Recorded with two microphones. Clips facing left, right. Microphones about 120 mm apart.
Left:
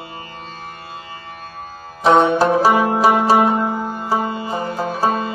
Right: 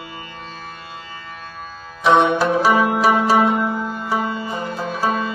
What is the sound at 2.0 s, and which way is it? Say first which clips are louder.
Music: left 2 dB; 40° left (ahead or behind).